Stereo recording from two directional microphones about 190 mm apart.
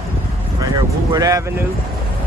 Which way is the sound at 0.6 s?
20° right (ahead or behind).